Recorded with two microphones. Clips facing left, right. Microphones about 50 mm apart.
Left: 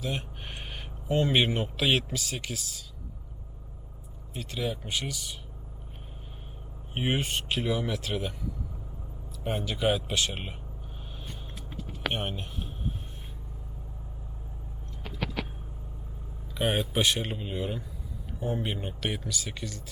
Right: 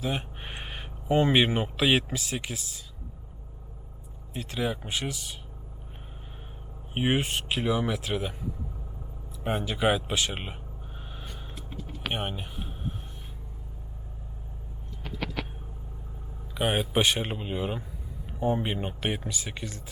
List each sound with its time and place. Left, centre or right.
0.0 s a sound: centre
1.5 s speech: centre
4.4 s speech: centre
6.9 s speech: centre
9.4 s speech: centre
12.0 s speech: centre
16.6 s speech: centre
16.9 s speech: centre